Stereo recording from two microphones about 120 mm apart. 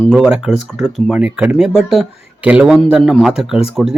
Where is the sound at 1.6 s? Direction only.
Centre (ahead or behind).